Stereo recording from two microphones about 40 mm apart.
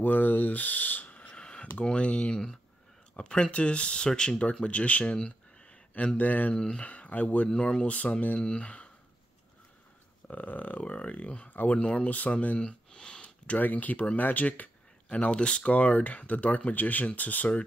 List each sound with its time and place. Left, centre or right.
0.0 s a sound: left
1.3 s speech: left
5.1 s a sound: left
6.1 s speech: left
6.5 s speech: left
6.9 s speech: left
8.4 s speech: left
10.2 s speech: left
13.6 s speech: left
15.0 s speech: left